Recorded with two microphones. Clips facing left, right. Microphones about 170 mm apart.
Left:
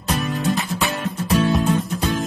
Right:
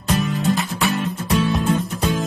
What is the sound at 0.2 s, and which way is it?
Music, centre (ahead or behind).